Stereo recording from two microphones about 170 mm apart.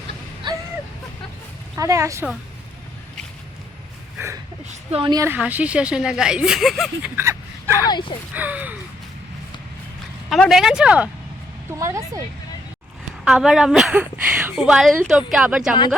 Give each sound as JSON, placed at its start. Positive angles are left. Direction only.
{"t": 0.4, "sound": "a sound", "side_deg": -25}
{"t": 1.7, "sound": "speech", "side_deg": -15}
{"t": 4.7, "sound": "a woman's voice", "side_deg": -35}
{"t": 5.2, "sound": "speech", "side_deg": -10}
{"t": 7.2, "sound": "a sound", "side_deg": -15}
{"t": 7.9, "sound": "speech", "side_deg": 25}
{"t": 8.3, "sound": "speech", "side_deg": -10}
{"t": 10.2, "sound": "speech", "side_deg": 0}
{"t": 11.8, "sound": "a woman's voice", "side_deg": -20}
{"t": 13.2, "sound": "speech", "side_deg": 0}